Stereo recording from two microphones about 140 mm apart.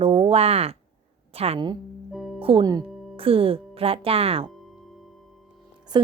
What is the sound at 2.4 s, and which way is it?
Speech, 40° right (ahead or behind).